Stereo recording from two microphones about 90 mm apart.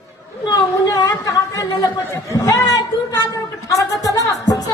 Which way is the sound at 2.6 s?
45° left (ahead or behind).